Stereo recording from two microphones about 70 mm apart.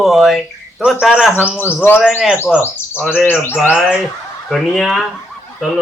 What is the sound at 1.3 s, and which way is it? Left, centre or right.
Speech, centre.